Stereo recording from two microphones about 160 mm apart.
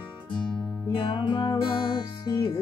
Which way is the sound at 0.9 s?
35° left (ahead or behind).